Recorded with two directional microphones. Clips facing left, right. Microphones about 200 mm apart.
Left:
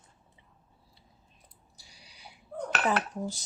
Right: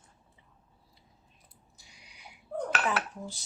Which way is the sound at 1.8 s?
35° left (ahead or behind).